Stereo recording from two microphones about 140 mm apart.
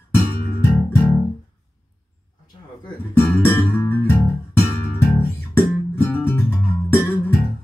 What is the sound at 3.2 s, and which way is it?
Music, 15° left (ahead or behind).